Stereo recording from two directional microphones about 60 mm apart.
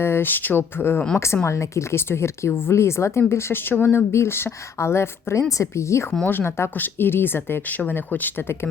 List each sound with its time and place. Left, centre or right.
0.0 s speech: left
1.5 s a woman's voice: left
5.5 s speech: left
6.2 s speech: left